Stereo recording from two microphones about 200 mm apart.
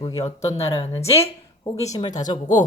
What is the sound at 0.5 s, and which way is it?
Speech, 15° left (ahead or behind).